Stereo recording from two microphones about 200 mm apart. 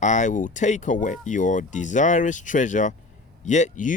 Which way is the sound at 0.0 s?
35° left (ahead or behind).